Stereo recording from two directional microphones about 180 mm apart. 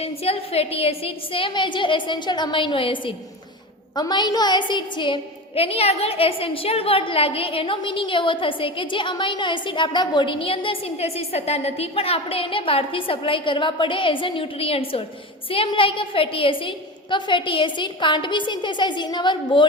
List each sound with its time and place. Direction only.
0.0 s a woman's voice: 35° left (ahead or behind)